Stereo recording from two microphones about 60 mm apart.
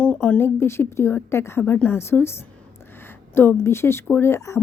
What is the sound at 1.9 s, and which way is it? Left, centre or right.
A woman's voice, left.